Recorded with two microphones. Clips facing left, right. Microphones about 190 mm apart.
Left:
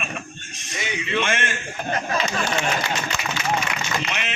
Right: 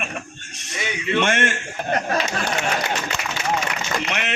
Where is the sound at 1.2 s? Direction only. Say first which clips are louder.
Right 4 dB; 70° right (ahead or behind).